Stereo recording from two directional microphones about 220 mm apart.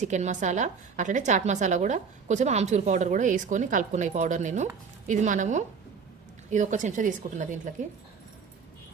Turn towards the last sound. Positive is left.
turn(degrees=-35)  # may be behind; listen again after turning